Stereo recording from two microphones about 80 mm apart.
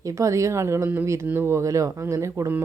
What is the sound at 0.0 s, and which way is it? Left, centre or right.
Speech, right.